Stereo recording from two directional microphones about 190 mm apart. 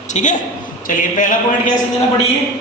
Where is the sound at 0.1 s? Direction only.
40° left (ahead or behind).